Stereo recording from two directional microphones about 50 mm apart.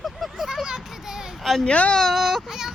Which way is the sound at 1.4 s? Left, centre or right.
Centre.